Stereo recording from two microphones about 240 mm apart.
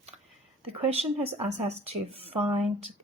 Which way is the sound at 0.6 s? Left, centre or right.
Right.